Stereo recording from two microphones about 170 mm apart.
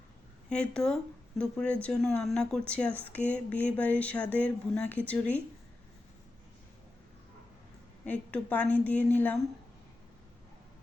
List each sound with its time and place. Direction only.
0.5 s speech: 5° left (ahead or behind)
8.0 s speech: 10° left (ahead or behind)